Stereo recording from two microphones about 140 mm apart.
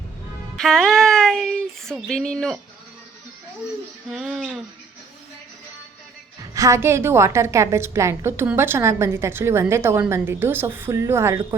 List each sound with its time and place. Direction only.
0.5 s child singing: 5° left (ahead or behind)
4.1 s a sound: centre (ahead or behind)
6.5 s a woman's voice: 20° right (ahead or behind)